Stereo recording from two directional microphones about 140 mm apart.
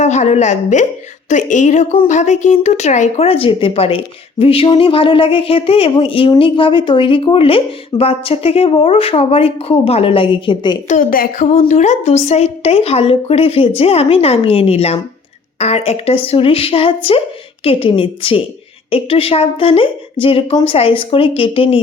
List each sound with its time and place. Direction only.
0.0 s a woman's voice: 55° left (ahead or behind); by 10.8 s 35° left (ahead or behind)
10.8 s speech: 75° left (ahead or behind)
11.7 s a woman's voice: 55° left (ahead or behind); by 21.8 s 40° left (ahead or behind)